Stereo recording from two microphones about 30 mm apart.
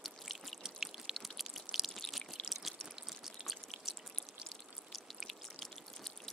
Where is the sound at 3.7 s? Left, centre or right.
Centre.